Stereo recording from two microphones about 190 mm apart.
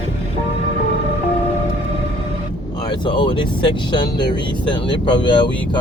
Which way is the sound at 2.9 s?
25° left (ahead or behind).